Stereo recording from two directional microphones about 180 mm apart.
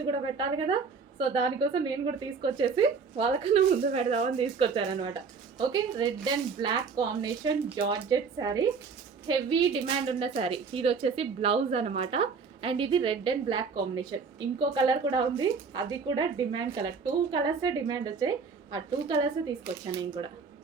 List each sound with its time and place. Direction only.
0.1 s a woman's voice: 25° right (ahead or behind)